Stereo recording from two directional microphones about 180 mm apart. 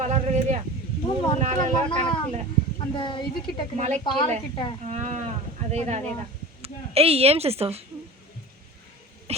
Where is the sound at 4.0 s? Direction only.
25° left (ahead or behind).